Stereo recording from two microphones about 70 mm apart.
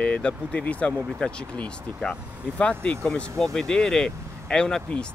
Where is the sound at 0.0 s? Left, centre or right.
Centre.